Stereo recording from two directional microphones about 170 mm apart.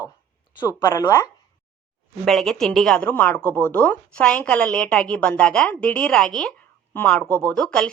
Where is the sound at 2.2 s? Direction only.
Centre (ahead or behind).